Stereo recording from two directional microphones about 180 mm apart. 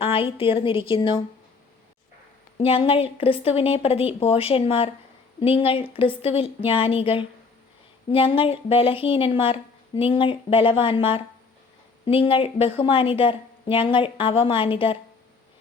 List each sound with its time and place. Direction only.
0.0 s a woman's voice: 30° left (ahead or behind)
2.6 s a woman's voice: 30° left (ahead or behind)